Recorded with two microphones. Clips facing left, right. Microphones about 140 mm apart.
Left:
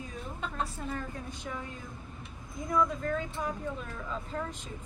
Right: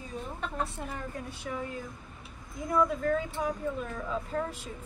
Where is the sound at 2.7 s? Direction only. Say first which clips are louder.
Right 3 dB; 5° right (ahead or behind).